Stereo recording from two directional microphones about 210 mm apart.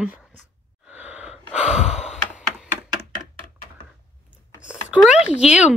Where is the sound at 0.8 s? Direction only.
5° right (ahead or behind).